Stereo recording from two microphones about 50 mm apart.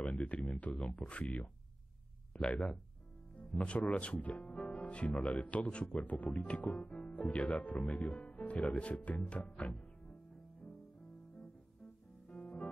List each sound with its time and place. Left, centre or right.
0.1 s speech: left
3.5 s speech: left
5.1 s speech: centre
5.4 s speech: left
6.8 s speech: centre
7.1 s speech: left
12.3 s music: left